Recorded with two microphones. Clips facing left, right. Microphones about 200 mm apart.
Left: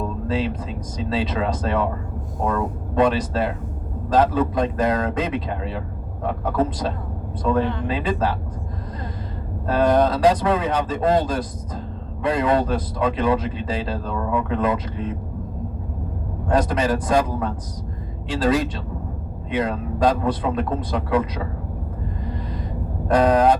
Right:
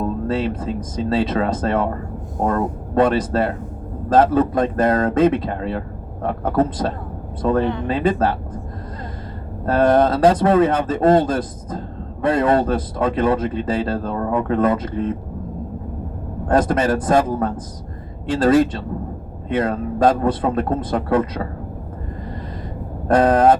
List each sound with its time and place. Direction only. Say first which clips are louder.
0.3 s speech: right 3 dB; 50° right (ahead or behind)
9.6 s speech: right 3 dB; 50° right (ahead or behind)
16.5 s speech: right 3 dB; 50° right (ahead or behind)
23.0 s speech: right 3 dB; 50° right (ahead or behind)